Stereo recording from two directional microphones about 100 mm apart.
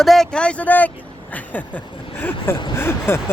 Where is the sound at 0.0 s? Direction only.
5° left (ahead or behind).